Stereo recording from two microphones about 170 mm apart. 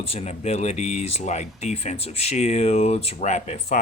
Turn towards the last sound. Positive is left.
turn(degrees=40)  # may be behind; listen again after turning